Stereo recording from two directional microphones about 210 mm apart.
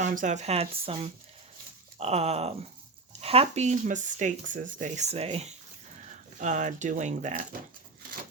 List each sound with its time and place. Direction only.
0.0 s speech: 35° right (ahead or behind)